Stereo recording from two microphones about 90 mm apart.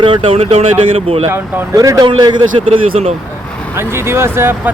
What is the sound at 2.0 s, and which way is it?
Speech, 60° right (ahead or behind).